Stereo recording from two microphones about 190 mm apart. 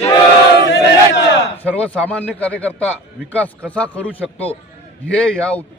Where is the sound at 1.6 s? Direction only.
5° left (ahead or behind).